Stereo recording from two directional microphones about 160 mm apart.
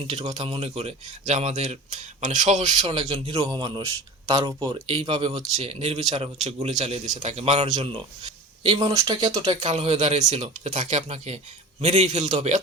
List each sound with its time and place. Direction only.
0.1 s speech: 40° right (ahead or behind)
3.2 s speech: 25° right (ahead or behind); by 7.9 s 40° right (ahead or behind)
8.8 s speech: 20° right (ahead or behind)
9.4 s speech: 45° right (ahead or behind)